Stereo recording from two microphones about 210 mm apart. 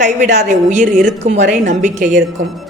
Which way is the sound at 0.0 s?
35° right (ahead or behind).